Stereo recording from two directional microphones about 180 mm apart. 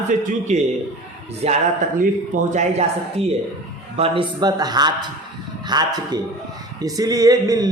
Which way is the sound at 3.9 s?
30° right (ahead or behind).